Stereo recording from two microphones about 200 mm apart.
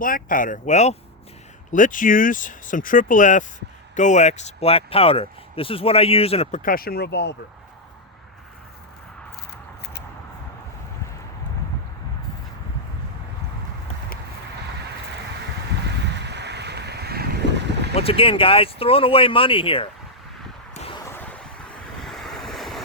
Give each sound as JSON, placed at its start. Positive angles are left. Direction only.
{"t": 0.0, "sound": "speech", "side_deg": 45}
{"t": 6.6, "sound": "speech", "side_deg": 45}
{"t": 16.2, "sound": "boat", "side_deg": -60}
{"t": 17.9, "sound": "speech", "side_deg": 30}
{"t": 20.7, "sound": "a sound", "side_deg": 30}
{"t": 21.0, "sound": "a sound", "side_deg": 10}
{"t": 22.0, "sound": "waves", "side_deg": 0}